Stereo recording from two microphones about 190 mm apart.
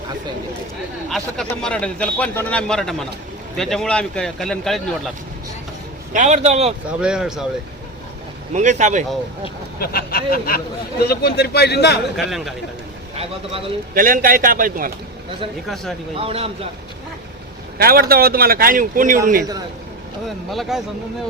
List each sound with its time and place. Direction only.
1.1 s speech: 5° left (ahead or behind)
6.1 s a man's voice: 40° right (ahead or behind)
7.0 s speech: 5° right (ahead or behind)
8.5 s a man's voice: 40° right (ahead or behind)
9.8 s a man's voice: 55° left (ahead or behind)
12.1 s speech: centre (ahead or behind)
13.9 s a man's voice: 50° right (ahead or behind)
15.6 s speech: centre (ahead or behind)
16.1 s a man's voice: 30° right (ahead or behind)
17.7 s a man's voice: 50° right (ahead or behind)
20.2 s speech: centre (ahead or behind)